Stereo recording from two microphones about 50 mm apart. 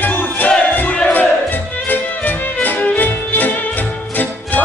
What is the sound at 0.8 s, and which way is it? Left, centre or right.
Battle cry, left.